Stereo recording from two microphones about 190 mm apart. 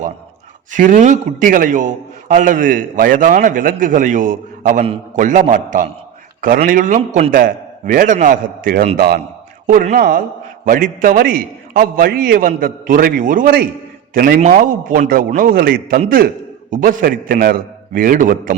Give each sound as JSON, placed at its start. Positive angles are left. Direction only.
{"t": 0.7, "sound": "a man's voice", "side_deg": -40}